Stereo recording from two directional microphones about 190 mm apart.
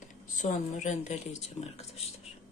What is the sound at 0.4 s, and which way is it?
A woman's voice, 40° left (ahead or behind).